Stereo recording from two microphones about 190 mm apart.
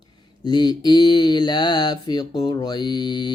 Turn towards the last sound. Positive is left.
turn(degrees=25)  # may be behind; listen again after turning